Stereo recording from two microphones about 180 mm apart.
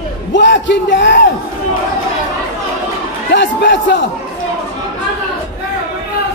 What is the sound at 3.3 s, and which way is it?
Speech, 75° left (ahead or behind).